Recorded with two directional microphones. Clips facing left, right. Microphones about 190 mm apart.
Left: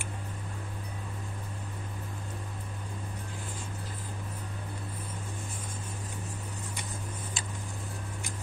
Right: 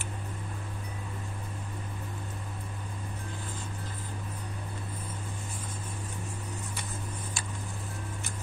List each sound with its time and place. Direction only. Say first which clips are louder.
7.4 s tick: right 1 dB; 20° left (ahead or behind)